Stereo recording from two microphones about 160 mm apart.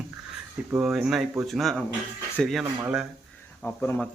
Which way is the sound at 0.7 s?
5° right (ahead or behind).